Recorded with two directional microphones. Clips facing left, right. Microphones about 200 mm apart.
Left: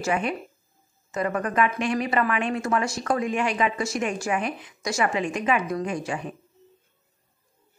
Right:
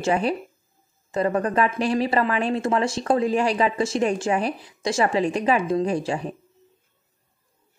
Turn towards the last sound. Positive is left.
turn(degrees=-30)  # may be behind; listen again after turning